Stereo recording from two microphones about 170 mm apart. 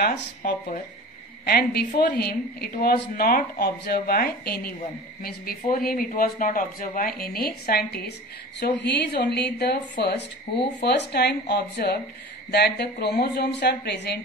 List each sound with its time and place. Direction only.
0.0 s a woman's voice: 75° left (ahead or behind)
8.5 s a woman's voice: 80° left